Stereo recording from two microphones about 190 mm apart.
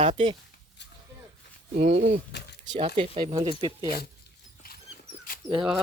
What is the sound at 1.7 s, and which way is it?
Speech, 40° right (ahead or behind).